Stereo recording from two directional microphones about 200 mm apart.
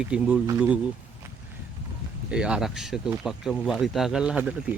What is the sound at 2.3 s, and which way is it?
Speech, 5° right (ahead or behind).